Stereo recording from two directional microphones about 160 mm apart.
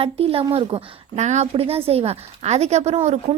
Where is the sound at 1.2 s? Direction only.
45° right (ahead or behind).